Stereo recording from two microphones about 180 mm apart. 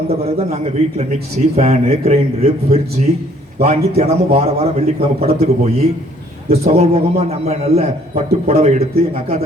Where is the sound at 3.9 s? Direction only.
35° right (ahead or behind).